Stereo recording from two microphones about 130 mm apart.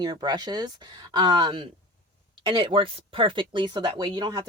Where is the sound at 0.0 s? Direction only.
30° right (ahead or behind).